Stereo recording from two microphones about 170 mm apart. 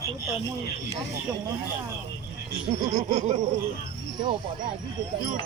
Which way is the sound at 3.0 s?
45° right (ahead or behind).